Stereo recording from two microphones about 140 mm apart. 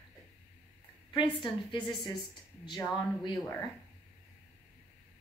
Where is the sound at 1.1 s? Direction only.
30° left (ahead or behind).